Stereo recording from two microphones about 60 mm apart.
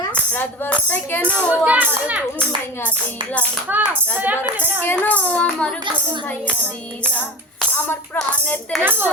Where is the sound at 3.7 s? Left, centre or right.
Right.